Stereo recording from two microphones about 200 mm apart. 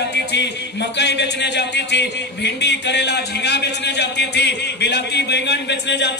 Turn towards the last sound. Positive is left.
turn(degrees=60)  # may be behind; listen again after turning